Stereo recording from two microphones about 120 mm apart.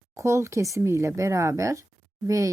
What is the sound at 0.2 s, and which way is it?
A woman's voice, 25° right (ahead or behind).